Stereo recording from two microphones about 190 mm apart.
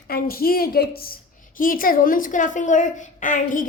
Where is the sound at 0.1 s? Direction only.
50° left (ahead or behind).